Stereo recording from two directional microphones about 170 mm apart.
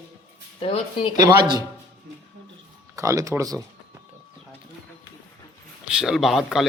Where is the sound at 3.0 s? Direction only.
20° right (ahead or behind).